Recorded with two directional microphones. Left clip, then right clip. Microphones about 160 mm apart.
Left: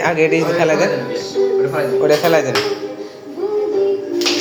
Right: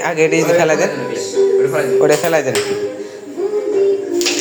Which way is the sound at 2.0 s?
30° right (ahead or behind).